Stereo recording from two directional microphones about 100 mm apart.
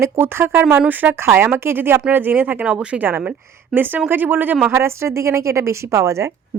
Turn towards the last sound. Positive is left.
turn(degrees=-30)  # may be behind; listen again after turning